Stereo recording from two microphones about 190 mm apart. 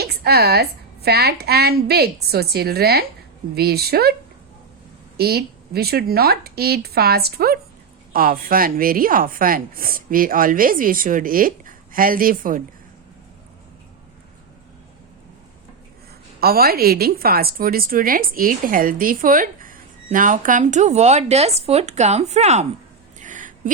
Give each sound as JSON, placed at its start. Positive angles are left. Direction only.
{"t": 0.0, "sound": "a woman's voice", "side_deg": -55}
{"t": 5.1, "sound": "a woman's voice", "side_deg": -55}
{"t": 16.4, "sound": "a woman's voice", "side_deg": -50}
{"t": 23.2, "sound": "a sound", "side_deg": -45}